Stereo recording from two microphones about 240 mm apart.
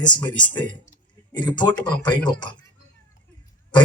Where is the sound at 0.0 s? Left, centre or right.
Centre.